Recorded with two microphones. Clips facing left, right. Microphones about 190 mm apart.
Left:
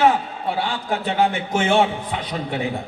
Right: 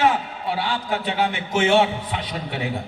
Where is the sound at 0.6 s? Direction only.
50° left (ahead or behind).